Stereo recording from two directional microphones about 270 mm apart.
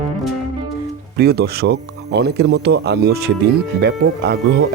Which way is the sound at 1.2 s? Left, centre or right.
Right.